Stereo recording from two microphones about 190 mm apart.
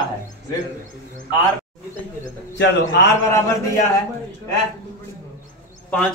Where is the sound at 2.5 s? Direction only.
65° left (ahead or behind).